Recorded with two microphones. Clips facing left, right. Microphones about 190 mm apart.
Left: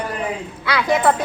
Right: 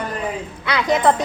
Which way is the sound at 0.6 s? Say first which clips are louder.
Even; 20° right (ahead or behind).